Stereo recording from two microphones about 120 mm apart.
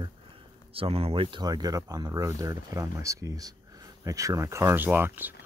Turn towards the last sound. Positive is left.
turn(degrees=-15)  # may be behind; listen again after turning